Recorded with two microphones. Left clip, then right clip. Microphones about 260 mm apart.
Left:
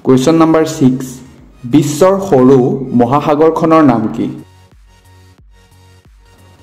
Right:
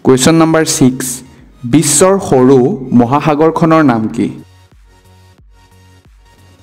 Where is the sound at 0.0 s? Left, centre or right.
Right.